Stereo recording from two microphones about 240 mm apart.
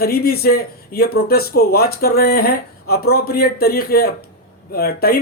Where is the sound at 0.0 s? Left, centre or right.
Left.